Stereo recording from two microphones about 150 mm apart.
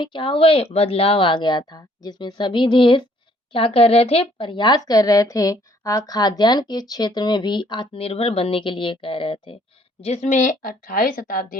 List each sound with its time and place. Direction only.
0.0 s speech: 35° left (ahead or behind)
10.0 s a woman's voice: 50° left (ahead or behind); by 11.5 s 65° left (ahead or behind)